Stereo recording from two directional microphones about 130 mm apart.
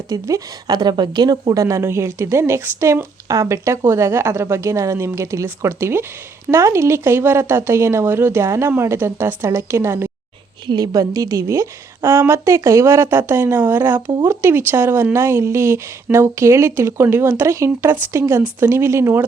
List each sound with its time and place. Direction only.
0.1 s a woman's voice: 25° right (ahead or behind)